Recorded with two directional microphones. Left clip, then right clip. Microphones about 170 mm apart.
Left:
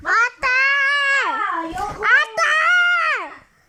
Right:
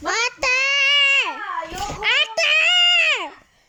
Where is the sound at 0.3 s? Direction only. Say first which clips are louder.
Left 2 dB; 15° right (ahead or behind).